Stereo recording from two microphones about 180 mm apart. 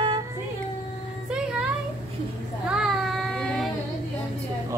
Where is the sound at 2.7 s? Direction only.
Centre (ahead or behind).